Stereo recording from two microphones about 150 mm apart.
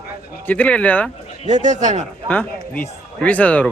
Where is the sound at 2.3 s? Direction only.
10° left (ahead or behind).